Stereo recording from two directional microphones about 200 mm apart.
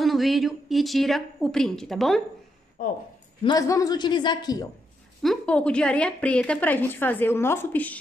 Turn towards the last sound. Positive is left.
turn(degrees=10)  # may be behind; listen again after turning